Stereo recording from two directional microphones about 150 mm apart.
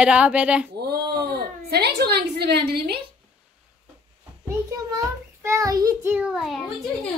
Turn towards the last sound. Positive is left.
turn(degrees=0)  # may be behind; listen again after turning